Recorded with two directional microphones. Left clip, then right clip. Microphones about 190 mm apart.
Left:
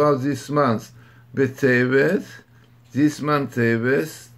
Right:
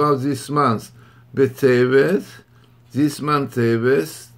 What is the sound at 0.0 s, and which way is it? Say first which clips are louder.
Speech: right 1 dB; 40° right (ahead or behind).